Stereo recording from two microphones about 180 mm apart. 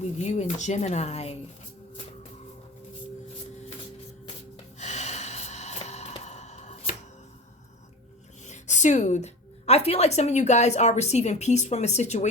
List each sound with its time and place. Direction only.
0.0 s a woman's voice: 40° left (ahead or behind)
4.8 s music: 40° left (ahead or behind)
8.4 s a woman's voice: 40° left (ahead or behind)